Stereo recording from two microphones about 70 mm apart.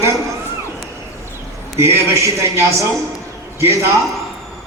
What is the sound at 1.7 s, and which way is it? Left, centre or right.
A man's voice, right.